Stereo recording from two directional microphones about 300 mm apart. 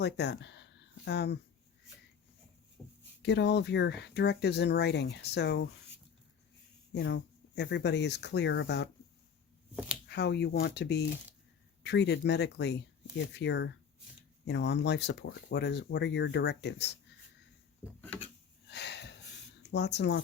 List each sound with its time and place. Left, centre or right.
0.0 s speech: left
3.2 s speech: left
6.9 s speech: left
10.1 s speech: left
17.8 s a sound: centre
18.7 s a sound: left
19.7 s speech: left